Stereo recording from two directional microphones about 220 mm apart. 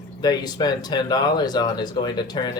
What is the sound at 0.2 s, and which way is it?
Speech, 20° left (ahead or behind).